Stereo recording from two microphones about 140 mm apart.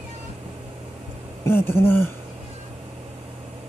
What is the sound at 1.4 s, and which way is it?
Speech, 15° left (ahead or behind).